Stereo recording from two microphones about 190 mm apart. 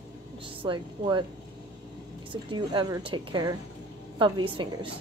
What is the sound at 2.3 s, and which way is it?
A woman's voice, 25° right (ahead or behind).